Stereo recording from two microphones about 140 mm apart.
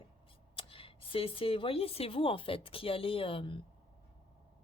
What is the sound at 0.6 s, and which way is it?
A woman's voice, 40° left (ahead or behind).